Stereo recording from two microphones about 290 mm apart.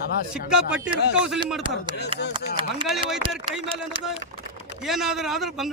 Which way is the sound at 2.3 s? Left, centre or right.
Centre.